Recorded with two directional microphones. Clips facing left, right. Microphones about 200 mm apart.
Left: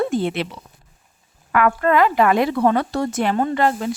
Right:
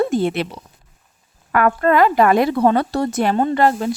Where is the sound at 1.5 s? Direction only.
40° right (ahead or behind).